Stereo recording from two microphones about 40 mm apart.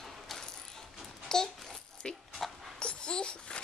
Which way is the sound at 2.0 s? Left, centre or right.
Left.